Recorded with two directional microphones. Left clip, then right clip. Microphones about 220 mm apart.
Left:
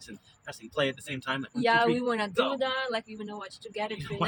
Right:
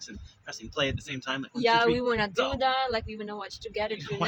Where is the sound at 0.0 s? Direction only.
10° left (ahead or behind).